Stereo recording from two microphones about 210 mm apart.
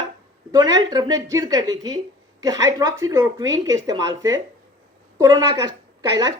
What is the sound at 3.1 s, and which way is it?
A woman's voice, 15° right (ahead or behind).